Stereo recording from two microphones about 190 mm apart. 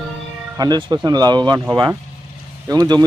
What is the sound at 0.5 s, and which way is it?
Speech, 20° right (ahead or behind).